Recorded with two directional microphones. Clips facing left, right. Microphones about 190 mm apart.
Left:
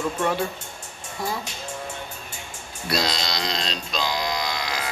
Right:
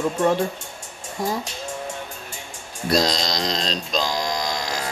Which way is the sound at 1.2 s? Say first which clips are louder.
Right 4 dB; 45° right (ahead or behind).